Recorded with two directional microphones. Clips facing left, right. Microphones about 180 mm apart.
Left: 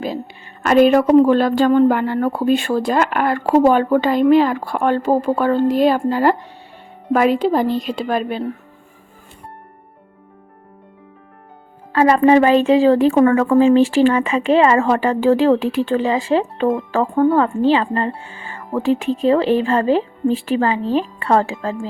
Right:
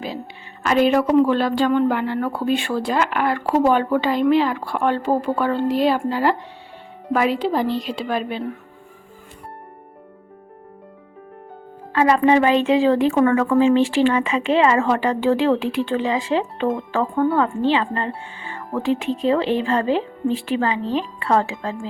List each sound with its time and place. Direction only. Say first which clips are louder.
0.6 s a woman's voice: left 5 dB; 50° left (ahead or behind)
11.9 s a woman's voice: left 3 dB; 40° left (ahead or behind)